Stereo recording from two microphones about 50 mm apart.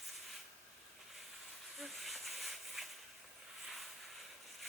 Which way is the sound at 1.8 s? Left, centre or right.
Centre.